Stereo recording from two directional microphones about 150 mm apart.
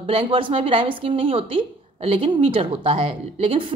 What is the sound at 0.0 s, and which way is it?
Speech, 40° right (ahead or behind).